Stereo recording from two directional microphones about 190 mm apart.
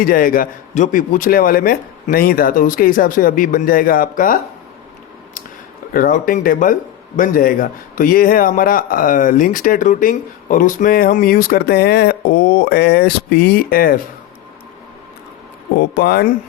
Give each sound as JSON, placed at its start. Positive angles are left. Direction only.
{"t": 0.0, "sound": "a man's voice", "side_deg": 50}
{"t": 5.9, "sound": "a man's voice", "side_deg": 45}
{"t": 15.8, "sound": "a man's voice", "side_deg": 55}